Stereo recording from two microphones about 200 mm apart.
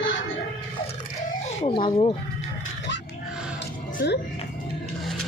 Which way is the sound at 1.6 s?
25° left (ahead or behind).